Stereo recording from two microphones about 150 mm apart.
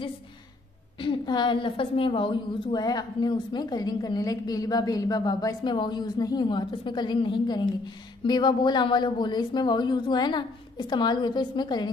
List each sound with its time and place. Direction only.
0.9 s a woman's voice: 30° left (ahead or behind)